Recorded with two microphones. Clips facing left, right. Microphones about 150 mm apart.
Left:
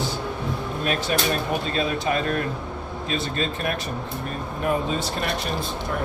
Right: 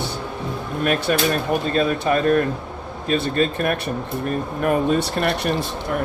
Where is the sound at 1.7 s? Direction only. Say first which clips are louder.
Right 5 dB; 50° right (ahead or behind).